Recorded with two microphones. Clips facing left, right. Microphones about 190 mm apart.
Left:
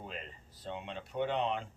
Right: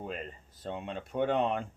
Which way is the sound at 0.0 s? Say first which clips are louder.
Right 6 dB; 50° right (ahead or behind).